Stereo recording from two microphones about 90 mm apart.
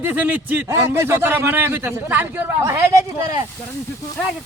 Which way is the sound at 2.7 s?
35° right (ahead or behind).